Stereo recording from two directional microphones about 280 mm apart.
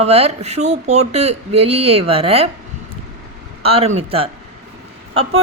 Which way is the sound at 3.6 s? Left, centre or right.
Right.